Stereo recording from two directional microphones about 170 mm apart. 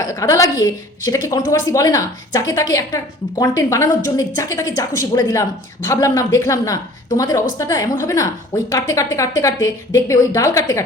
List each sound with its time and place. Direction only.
0.0 s a woman's voice: 20° left (ahead or behind)